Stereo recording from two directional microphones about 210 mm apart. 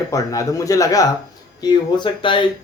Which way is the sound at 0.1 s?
15° left (ahead or behind).